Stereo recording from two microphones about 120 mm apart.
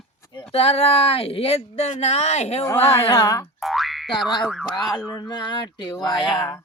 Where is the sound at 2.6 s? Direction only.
20° left (ahead or behind).